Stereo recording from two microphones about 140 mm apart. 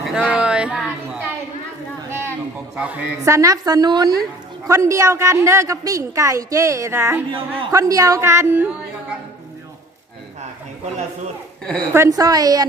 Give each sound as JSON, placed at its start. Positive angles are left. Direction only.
{"t": 0.0, "sound": "a sound", "side_deg": -5}
{"t": 2.0, "sound": "a sound", "side_deg": -20}
{"t": 2.7, "sound": "speech", "side_deg": -10}
{"t": 3.2, "sound": "a woman's voice", "side_deg": -20}
{"t": 7.3, "sound": "a man's voice", "side_deg": -40}
{"t": 7.7, "sound": "a woman's voice", "side_deg": -25}
{"t": 11.6, "sound": "a woman's voice", "side_deg": 5}
{"t": 11.9, "sound": "a woman's voice", "side_deg": -25}